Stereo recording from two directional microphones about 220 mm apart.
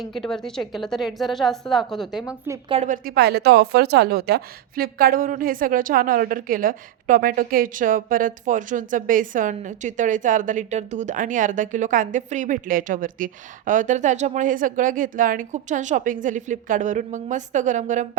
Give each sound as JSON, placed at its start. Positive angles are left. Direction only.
{"t": 0.0, "sound": "a woman's voice", "side_deg": 0}
{"t": 2.6, "sound": "a woman's voice", "side_deg": -30}